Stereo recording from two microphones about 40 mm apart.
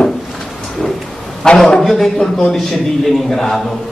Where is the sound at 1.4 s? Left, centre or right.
Centre.